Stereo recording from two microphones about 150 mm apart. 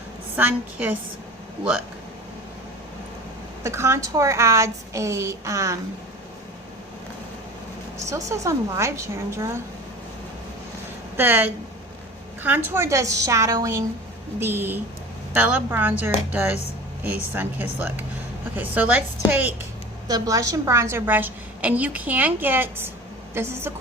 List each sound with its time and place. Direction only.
0.3 s a woman's voice: 10° right (ahead or behind)
3.6 s a woman's voice: 20° right (ahead or behind)
7.9 s a woman's voice: 20° right (ahead or behind)
11.2 s a woman's voice: 15° right (ahead or behind)
20.1 s a woman's voice: 25° right (ahead or behind)